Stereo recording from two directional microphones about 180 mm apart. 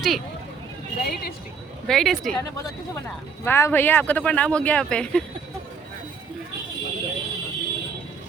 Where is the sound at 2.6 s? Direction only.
20° left (ahead or behind).